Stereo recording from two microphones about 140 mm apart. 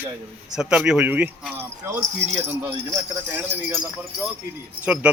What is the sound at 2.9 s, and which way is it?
Speech, 15° right (ahead or behind).